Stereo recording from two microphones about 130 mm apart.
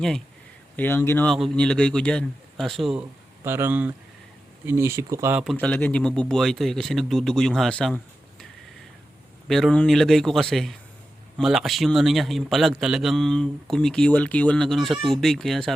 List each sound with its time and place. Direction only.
0.8 s speech: 15° left (ahead or behind)
1.3 s a man's voice: 5° left (ahead or behind)
3.4 s speech: 20° right (ahead or behind)
5.5 s a man's voice: 10° left (ahead or behind)
9.5 s a man's voice: centre (ahead or behind)